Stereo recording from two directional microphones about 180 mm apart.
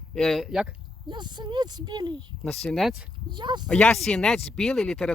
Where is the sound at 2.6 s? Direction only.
Centre (ahead or behind).